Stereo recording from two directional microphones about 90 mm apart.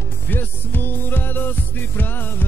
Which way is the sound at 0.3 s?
20° left (ahead or behind).